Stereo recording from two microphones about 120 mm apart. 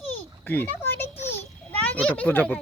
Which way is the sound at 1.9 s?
10° left (ahead or behind).